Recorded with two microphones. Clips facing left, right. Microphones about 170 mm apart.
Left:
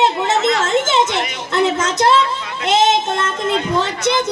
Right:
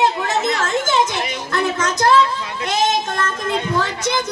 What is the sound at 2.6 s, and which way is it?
Child singing, 25° left (ahead or behind).